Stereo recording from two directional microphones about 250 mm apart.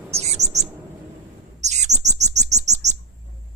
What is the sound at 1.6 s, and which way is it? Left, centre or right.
Bird, right.